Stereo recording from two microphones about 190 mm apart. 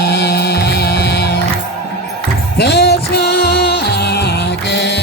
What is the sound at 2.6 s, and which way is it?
Music, 60° left (ahead or behind).